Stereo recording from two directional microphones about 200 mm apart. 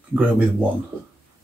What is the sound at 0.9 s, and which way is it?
Speech, 5° left (ahead or behind).